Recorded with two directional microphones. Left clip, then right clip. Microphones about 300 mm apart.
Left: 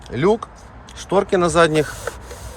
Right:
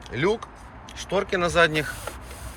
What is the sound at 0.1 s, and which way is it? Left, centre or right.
Speech, centre.